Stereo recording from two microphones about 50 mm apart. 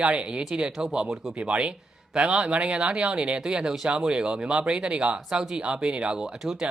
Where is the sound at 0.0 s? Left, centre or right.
Right.